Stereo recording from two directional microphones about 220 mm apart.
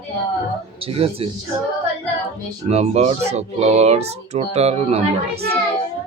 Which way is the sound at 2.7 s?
25° right (ahead or behind).